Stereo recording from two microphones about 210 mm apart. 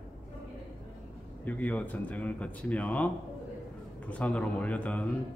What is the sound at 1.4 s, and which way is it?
A man's voice, 5° left (ahead or behind).